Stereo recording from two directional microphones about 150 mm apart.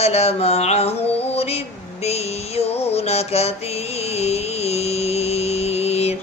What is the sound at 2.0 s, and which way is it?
Music, 45° left (ahead or behind).